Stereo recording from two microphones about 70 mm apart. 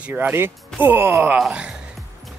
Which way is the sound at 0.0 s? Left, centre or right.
Right.